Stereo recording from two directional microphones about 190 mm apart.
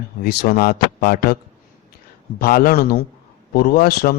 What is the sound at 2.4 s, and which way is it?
Speech, 50° left (ahead or behind).